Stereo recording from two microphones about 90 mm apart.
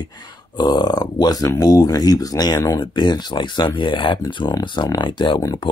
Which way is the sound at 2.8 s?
55° left (ahead or behind).